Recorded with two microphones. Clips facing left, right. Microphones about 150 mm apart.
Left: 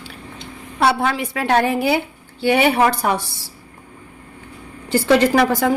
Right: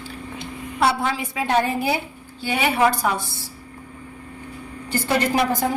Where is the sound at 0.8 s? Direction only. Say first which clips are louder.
Left 3 dB; 65° left (ahead or behind).